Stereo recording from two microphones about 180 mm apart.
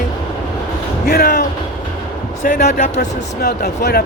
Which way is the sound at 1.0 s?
55° left (ahead or behind).